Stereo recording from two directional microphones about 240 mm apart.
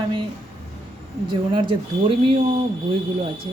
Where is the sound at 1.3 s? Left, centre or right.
Right.